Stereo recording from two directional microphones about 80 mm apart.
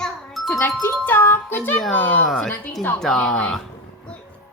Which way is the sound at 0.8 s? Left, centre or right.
Left.